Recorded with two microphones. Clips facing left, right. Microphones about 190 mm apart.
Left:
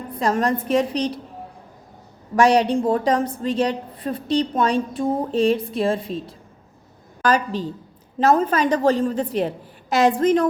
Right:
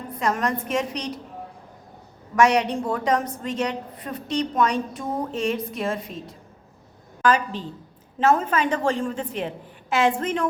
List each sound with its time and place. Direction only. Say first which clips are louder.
0.2 s a woman's voice: left 4 dB; 30° left (ahead or behind)
2.3 s a woman's voice: left 3 dB; 30° left (ahead or behind)